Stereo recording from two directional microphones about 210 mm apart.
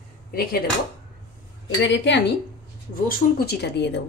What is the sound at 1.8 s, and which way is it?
A woman's voice, 60° left (ahead or behind).